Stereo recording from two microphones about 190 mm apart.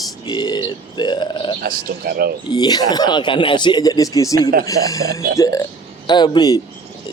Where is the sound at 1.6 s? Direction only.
50° right (ahead or behind).